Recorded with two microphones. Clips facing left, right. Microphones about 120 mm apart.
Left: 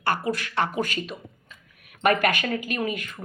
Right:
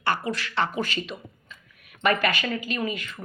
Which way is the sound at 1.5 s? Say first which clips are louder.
Right 1 dB; 50° left (ahead or behind).